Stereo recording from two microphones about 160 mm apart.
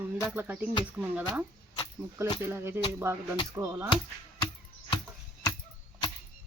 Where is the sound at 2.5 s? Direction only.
15° right (ahead or behind).